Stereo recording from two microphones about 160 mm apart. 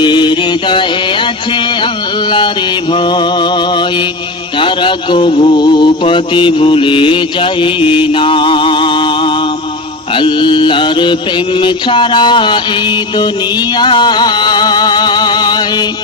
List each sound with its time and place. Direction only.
0.0 s music: 30° left (ahead or behind)
2.9 s music: 30° left (ahead or behind)
4.6 s mantra: 30° left (ahead or behind)
10.2 s music: 30° left (ahead or behind)
11.6 s mantra: 30° left (ahead or behind)
13.7 s music: 30° left (ahead or behind)